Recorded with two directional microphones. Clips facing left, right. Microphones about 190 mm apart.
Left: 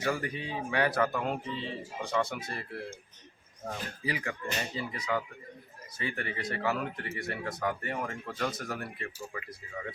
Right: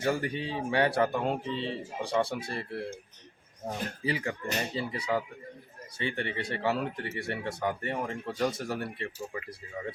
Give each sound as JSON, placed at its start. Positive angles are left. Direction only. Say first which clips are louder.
{"t": 0.0, "sound": "speech", "louder": "right 3 dB", "side_deg": -30}